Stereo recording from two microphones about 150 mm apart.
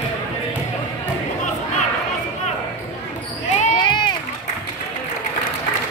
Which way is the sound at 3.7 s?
30° left (ahead or behind).